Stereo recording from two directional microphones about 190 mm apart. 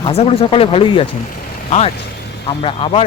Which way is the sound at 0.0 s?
30° left (ahead or behind).